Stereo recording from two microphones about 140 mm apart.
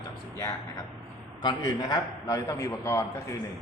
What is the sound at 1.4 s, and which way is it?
A man's voice, 30° left (ahead or behind).